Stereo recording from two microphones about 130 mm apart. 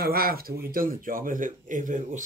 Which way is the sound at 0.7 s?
90° right.